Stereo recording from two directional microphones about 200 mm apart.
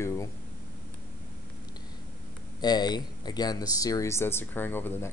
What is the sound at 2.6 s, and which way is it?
Speech, 20° left (ahead or behind).